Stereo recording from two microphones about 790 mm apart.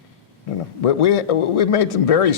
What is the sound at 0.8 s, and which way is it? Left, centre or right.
Speech, left.